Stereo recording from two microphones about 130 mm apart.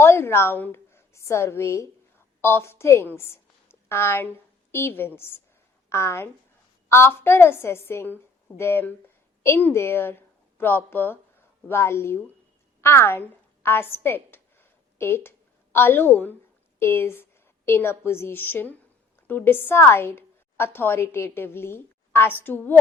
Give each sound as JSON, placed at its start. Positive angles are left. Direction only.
{"t": 0.0, "sound": "a woman's voice", "side_deg": 20}
{"t": 12.8, "sound": "a sound", "side_deg": 20}
{"t": 16.8, "sound": "a woman's voice", "side_deg": 20}